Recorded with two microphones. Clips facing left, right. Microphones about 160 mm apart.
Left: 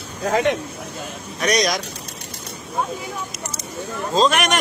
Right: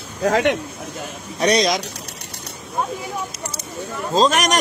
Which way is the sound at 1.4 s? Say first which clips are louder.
Right 3 dB; 30° right (ahead or behind).